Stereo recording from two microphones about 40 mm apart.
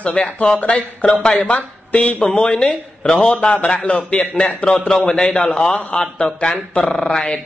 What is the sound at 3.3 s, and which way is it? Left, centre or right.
A man's voice, left.